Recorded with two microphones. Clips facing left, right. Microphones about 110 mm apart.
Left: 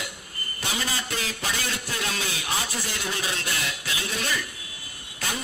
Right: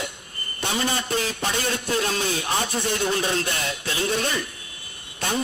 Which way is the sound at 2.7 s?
25° right (ahead or behind).